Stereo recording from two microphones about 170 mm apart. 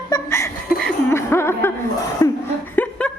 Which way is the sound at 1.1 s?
15° left (ahead or behind).